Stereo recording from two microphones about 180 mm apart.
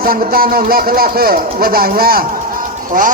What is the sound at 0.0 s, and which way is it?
Speech, 55° right (ahead or behind).